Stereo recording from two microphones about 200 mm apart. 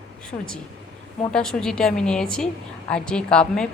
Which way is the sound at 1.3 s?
5° left (ahead or behind).